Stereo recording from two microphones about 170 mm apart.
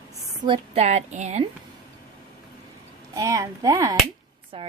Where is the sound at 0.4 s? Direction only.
35° right (ahead or behind).